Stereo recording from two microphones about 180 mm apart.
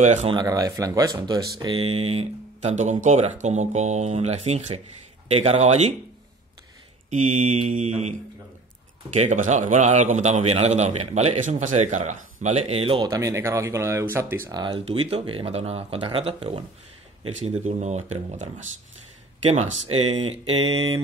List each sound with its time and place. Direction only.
0.0 s a man's voice: 40° right (ahead or behind)
0.3 s a man's voice: 20° right (ahead or behind); by 5.9 s 35° right (ahead or behind)
7.1 s mantra: 45° right (ahead or behind)
9.1 s a man's voice: 40° right (ahead or behind); by 14.6 s 15° right (ahead or behind)
14.6 s a man's voice: 30° right (ahead or behind)